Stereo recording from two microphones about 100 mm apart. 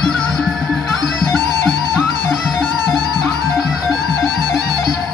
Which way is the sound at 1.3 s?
45° right (ahead or behind).